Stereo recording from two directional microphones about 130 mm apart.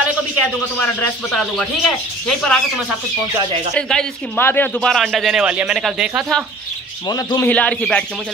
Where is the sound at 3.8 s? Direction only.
5° left (ahead or behind).